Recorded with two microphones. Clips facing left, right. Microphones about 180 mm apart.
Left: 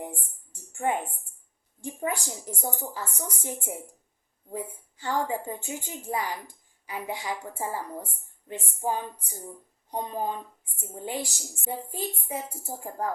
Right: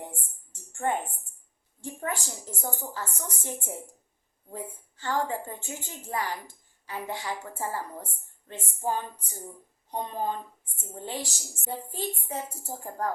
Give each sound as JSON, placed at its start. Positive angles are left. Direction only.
{"t": 0.7, "sound": "music", "side_deg": 15}
{"t": 1.8, "sound": "a woman's voice", "side_deg": 15}